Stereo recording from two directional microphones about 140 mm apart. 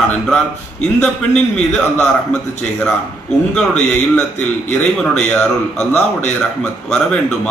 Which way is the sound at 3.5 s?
5° left (ahead or behind).